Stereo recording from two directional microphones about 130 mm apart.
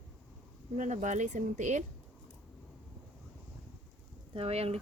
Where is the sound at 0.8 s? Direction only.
65° right (ahead or behind).